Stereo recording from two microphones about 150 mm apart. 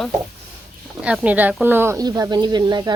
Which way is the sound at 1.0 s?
5° right (ahead or behind).